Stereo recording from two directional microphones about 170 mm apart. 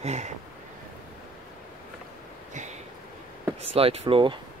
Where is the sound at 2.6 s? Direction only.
45° right (ahead or behind).